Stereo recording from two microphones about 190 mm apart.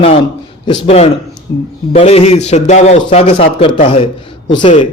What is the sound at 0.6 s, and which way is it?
A man's voice, 30° left (ahead or behind).